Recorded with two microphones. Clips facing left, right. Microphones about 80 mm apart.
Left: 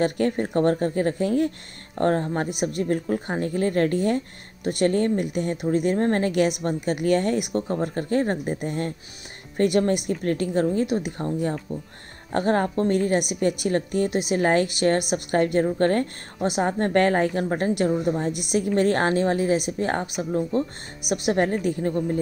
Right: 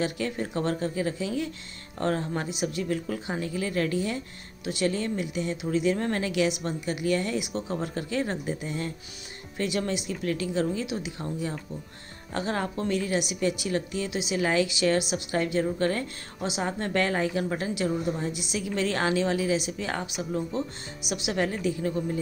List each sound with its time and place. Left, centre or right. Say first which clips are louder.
0.0 s a woman's voice: left 7 dB; left
6.8 s a woman's voice: left 6 dB; left